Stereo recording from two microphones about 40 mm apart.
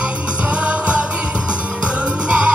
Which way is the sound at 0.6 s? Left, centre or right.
Right.